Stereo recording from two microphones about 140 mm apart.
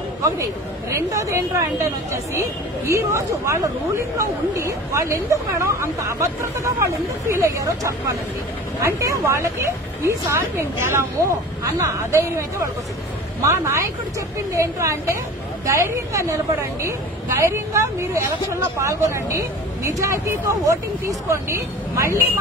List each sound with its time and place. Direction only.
0.8 s speech: 20° right (ahead or behind)
2.9 s speech: 20° right (ahead or behind)
17.4 s speech: 20° right (ahead or behind)